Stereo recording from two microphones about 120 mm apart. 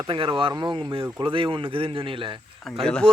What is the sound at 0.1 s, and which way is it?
Speech, 40° right (ahead or behind).